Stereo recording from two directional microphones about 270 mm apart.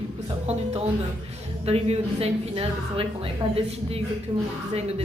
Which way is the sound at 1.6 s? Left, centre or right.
Right.